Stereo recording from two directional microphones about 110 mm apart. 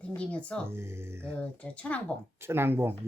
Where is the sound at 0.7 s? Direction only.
25° right (ahead or behind).